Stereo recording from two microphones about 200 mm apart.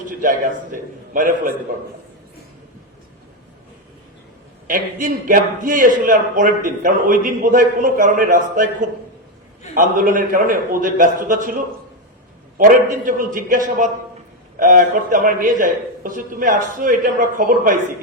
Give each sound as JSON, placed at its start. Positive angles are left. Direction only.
{"t": 0.1, "sound": "a man's voice", "side_deg": -45}
{"t": 4.6, "sound": "a man's voice", "side_deg": -45}
{"t": 9.7, "sound": "a man's voice", "side_deg": -45}